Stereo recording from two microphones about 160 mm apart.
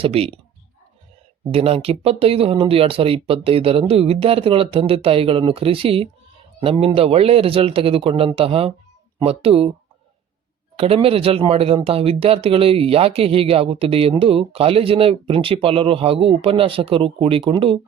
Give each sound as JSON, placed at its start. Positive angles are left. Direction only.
{"t": 0.0, "sound": "speech", "side_deg": -40}
{"t": 1.5, "sound": "speech", "side_deg": -40}
{"t": 10.8, "sound": "speech", "side_deg": -35}